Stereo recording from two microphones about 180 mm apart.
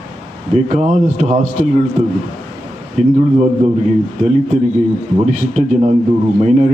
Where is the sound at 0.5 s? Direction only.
40° right (ahead or behind).